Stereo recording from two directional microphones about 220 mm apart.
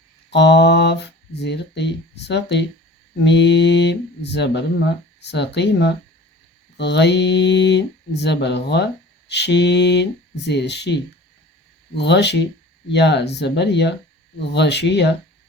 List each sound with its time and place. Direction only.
0.3 s speech: 50° left (ahead or behind)